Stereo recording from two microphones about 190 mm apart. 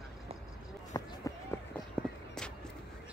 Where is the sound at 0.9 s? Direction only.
15° left (ahead or behind).